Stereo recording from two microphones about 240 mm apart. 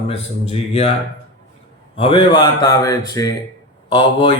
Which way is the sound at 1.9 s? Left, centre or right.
Left.